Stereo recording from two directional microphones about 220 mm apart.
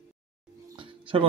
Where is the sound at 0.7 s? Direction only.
25° right (ahead or behind).